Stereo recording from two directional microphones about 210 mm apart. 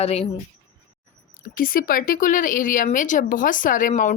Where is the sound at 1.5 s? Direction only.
40° left (ahead or behind).